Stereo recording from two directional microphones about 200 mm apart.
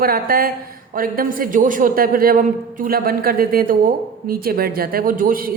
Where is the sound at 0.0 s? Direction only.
50° right (ahead or behind).